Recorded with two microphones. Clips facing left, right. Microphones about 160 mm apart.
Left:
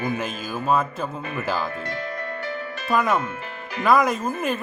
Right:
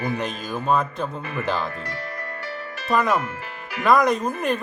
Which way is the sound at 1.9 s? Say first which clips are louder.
Left 3 dB; 25° left (ahead or behind).